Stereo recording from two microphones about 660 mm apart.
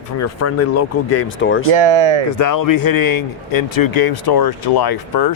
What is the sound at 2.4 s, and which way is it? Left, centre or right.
Speech, left.